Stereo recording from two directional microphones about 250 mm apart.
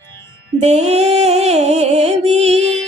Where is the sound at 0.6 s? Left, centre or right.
Right.